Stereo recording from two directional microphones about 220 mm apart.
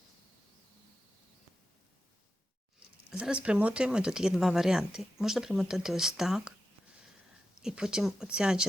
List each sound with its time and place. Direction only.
3.1 s speech: 5° right (ahead or behind)
7.6 s speech: 5° right (ahead or behind)